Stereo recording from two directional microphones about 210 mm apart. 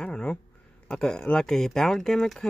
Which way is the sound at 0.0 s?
5° left (ahead or behind).